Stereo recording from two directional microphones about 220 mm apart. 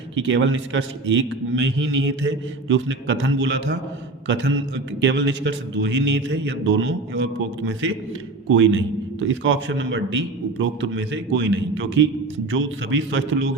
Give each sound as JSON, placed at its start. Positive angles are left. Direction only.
{"t": 0.2, "sound": "a man's voice", "side_deg": -55}
{"t": 4.9, "sound": "a man's voice", "side_deg": -55}